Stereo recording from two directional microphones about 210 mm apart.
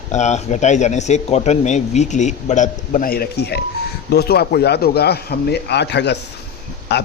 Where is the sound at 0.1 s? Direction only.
35° left (ahead or behind).